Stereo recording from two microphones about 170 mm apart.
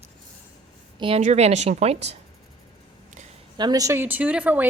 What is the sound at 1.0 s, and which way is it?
A woman's voice, 35° right (ahead or behind).